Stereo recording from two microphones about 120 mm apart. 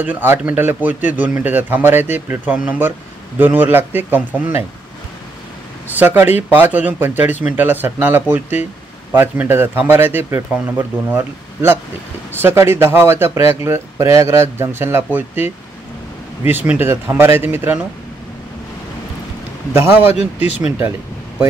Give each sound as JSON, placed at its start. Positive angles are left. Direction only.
{"t": 0.0, "sound": "a man's voice", "side_deg": -15}
{"t": 5.9, "sound": "a man's voice", "side_deg": -15}
{"t": 19.8, "sound": "speech", "side_deg": 65}